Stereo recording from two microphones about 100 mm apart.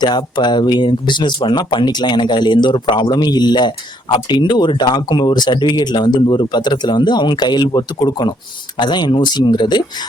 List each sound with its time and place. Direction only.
0.0 s speech: 45° left (ahead or behind)